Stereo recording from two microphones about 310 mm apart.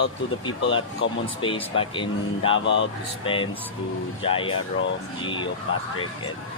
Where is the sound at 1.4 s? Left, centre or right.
Centre.